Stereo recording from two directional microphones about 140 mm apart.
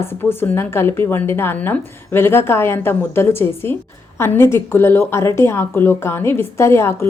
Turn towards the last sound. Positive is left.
turn(degrees=20)  # may be behind; listen again after turning